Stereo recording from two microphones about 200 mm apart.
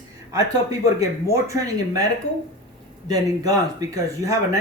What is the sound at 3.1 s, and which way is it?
Speech, 20° right (ahead or behind).